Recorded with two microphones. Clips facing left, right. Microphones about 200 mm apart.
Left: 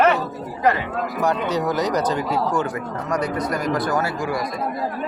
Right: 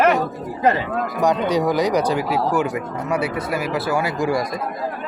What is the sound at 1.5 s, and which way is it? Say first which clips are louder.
A man's voice: right 3 dB; 10° right (ahead or behind).